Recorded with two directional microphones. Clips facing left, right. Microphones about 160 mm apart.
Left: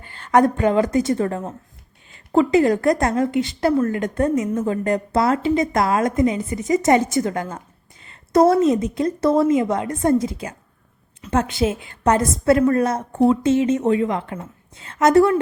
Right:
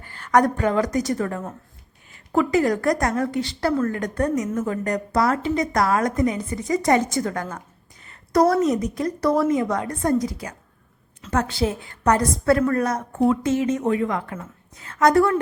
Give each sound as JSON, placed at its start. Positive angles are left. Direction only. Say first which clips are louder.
{"t": 0.0, "sound": "a woman's voice", "louder": "left 2 dB", "side_deg": 25}